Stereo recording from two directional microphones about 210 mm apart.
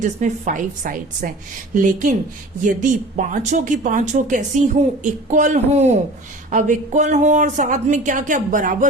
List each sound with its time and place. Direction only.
0.0 s speech: 35° right (ahead or behind)